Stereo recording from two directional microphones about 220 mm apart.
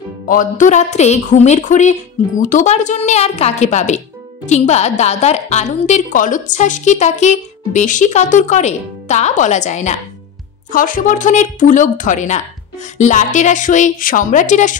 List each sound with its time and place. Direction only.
0.3 s a woman's voice: 35° left (ahead or behind)